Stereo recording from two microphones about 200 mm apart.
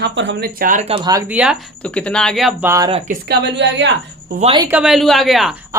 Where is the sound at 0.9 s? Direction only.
20° right (ahead or behind).